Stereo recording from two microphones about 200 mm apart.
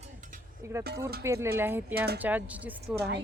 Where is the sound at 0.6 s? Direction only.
15° right (ahead or behind).